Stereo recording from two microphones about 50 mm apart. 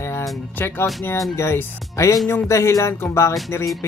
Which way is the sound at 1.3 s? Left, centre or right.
Left.